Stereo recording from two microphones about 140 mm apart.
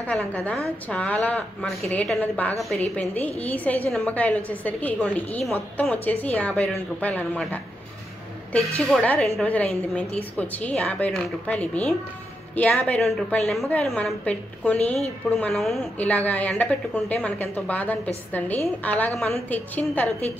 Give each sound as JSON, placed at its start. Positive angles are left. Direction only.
{"t": 0.0, "sound": "a woman's voice", "side_deg": 5}